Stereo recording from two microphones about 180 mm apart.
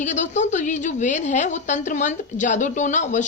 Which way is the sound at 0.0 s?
40° left (ahead or behind).